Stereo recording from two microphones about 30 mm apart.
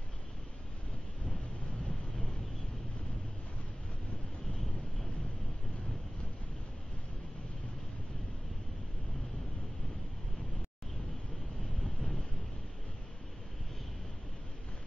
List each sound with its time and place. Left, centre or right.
1.9 s vehicle: left
11.8 s wind noise: left